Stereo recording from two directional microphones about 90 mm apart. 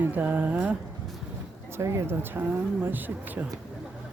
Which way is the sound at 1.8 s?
30° right (ahead or behind).